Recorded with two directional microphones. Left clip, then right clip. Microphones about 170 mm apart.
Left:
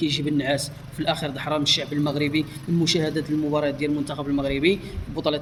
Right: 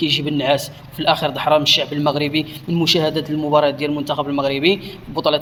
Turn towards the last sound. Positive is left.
turn(degrees=15)  # may be behind; listen again after turning